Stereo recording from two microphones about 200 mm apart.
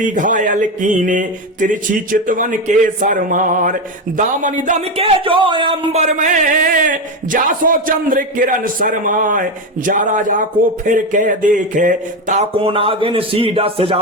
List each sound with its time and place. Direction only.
0.1 s speech: 40° right (ahead or behind)